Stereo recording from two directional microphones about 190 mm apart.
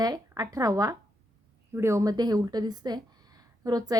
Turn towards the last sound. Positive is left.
turn(degrees=-20)  # may be behind; listen again after turning